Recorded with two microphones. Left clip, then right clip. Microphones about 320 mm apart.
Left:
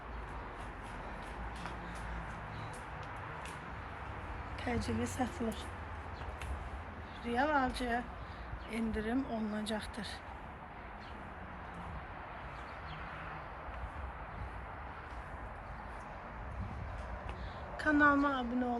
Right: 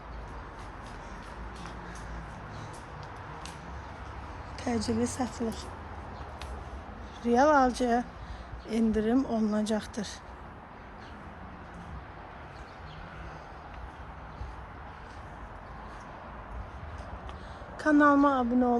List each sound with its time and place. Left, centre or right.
4.6 s speech: centre
7.2 s speech: centre
17.9 s speech: centre